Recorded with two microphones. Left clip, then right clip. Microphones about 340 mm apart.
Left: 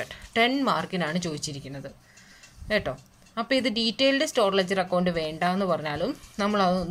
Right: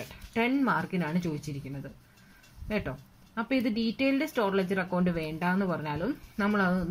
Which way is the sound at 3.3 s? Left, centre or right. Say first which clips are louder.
Left 5 dB; centre.